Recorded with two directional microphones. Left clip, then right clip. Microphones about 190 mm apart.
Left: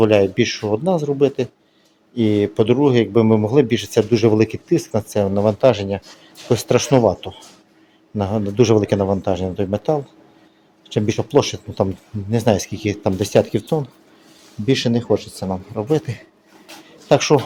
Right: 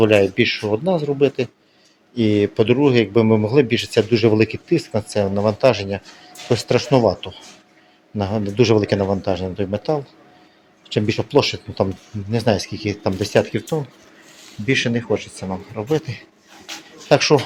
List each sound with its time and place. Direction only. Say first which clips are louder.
0.0 s speech: even; 5° left (ahead or behind)
10.9 s a man's voice: even; 5° left (ahead or behind); by 16.2 s 25° left (ahead or behind)
16.7 s speech: right 6 dB; centre (ahead or behind)
17.1 s speech: even; 15° left (ahead or behind)